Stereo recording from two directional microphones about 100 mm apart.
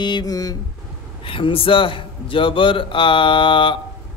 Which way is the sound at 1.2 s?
65° left (ahead or behind).